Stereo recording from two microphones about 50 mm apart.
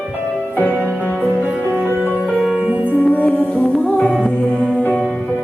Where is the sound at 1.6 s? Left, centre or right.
Right.